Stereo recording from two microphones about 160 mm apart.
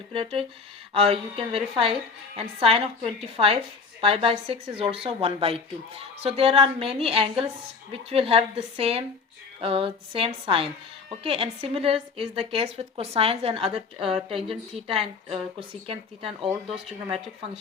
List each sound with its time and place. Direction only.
0.1 s a woman's voice: 35° right (ahead or behind)